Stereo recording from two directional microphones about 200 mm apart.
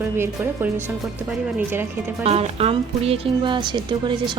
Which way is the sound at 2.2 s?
30° right (ahead or behind).